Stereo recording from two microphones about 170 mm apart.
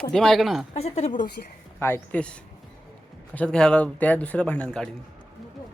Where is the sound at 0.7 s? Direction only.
40° left (ahead or behind).